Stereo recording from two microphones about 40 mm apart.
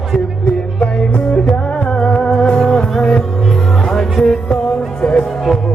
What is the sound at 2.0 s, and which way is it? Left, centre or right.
Music, left.